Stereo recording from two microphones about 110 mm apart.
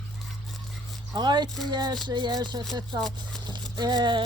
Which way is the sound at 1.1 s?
40° right (ahead or behind).